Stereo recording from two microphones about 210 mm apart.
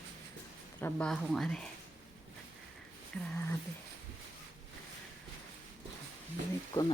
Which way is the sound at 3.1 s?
5° left (ahead or behind).